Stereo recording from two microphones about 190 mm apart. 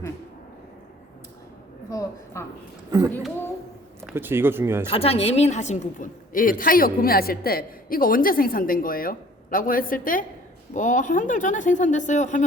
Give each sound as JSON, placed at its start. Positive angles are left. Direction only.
{"t": 1.9, "sound": "a sound", "side_deg": 15}
{"t": 4.1, "sound": "speech", "side_deg": -10}
{"t": 4.9, "sound": "a woman's voice", "side_deg": 30}